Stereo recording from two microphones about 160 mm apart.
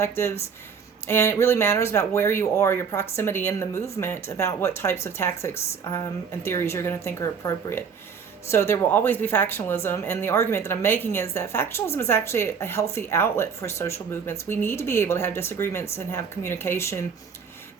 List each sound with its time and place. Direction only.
0.0 s speech: 15° left (ahead or behind)